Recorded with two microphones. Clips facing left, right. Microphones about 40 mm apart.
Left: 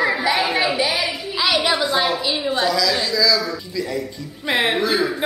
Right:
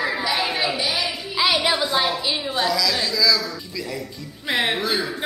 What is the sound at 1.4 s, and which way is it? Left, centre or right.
A woman's voice, centre.